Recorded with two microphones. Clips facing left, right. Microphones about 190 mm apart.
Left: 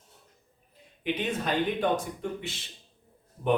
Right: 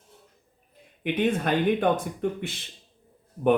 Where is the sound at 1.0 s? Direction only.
55° right (ahead or behind).